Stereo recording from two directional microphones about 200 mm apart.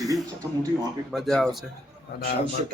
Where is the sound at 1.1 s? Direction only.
Centre (ahead or behind).